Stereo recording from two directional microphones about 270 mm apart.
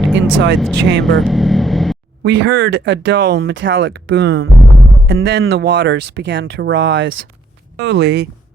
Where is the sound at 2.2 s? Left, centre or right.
Right.